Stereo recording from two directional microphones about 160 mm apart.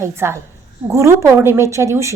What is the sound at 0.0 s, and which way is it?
A woman's voice, 15° right (ahead or behind).